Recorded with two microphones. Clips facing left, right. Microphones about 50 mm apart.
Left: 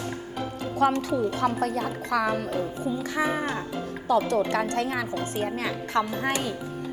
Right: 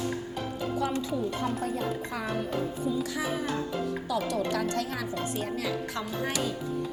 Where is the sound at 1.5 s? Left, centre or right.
Left.